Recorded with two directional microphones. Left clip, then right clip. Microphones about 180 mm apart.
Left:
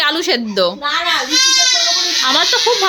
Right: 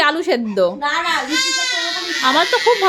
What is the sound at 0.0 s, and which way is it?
Speech, 5° right (ahead or behind).